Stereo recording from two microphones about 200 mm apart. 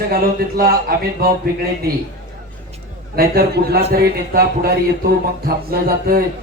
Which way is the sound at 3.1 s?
50° right (ahead or behind).